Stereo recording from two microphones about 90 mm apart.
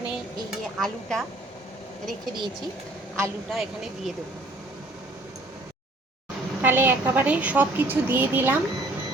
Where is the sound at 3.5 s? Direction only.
Centre (ahead or behind).